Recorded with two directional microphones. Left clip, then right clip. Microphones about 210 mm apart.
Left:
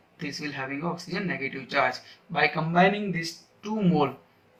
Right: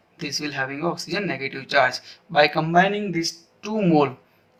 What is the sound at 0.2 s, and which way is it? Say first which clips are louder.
Speech: right 7 dB; 50° right (ahead or behind).